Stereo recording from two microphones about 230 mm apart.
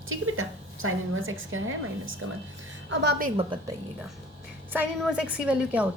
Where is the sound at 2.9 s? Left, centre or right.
Right.